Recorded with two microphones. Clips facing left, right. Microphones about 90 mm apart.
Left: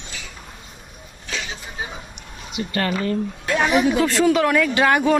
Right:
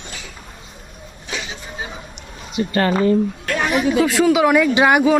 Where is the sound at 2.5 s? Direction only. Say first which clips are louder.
Right 6 dB; 35° right (ahead or behind).